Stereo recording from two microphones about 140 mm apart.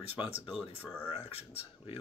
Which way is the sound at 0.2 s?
45° left (ahead or behind).